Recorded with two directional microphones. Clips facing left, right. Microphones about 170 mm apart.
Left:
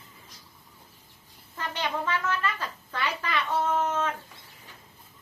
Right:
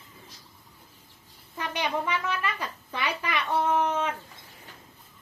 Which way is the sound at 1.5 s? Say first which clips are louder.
Right 2 dB; 15° right (ahead or behind).